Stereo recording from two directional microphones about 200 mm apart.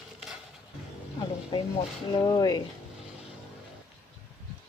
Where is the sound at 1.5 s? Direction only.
20° left (ahead or behind).